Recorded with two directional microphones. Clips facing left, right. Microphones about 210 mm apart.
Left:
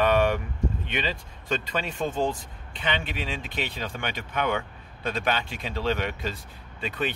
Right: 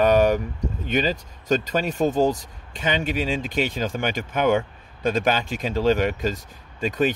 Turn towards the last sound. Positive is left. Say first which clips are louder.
# right 8 dB
turn(degrees=-45)  # may be behind; listen again after turning